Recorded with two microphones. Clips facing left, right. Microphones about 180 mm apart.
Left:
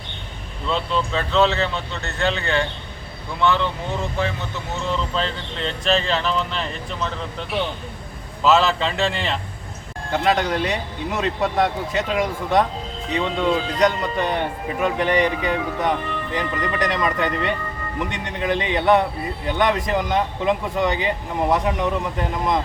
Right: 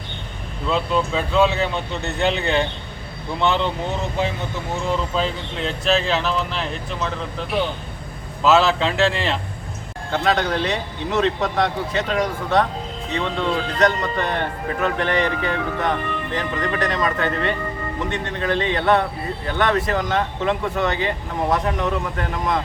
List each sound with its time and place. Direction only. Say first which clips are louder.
0.7 s speech: right 2 dB; 10° right (ahead or behind)
5.1 s speech: right 2 dB; 5° right (ahead or behind)
10.1 s speech: even; 10° left (ahead or behind)